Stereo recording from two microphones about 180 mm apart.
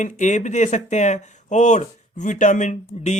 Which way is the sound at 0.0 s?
45° left (ahead or behind).